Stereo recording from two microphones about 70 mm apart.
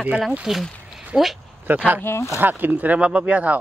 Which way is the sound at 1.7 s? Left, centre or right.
Right.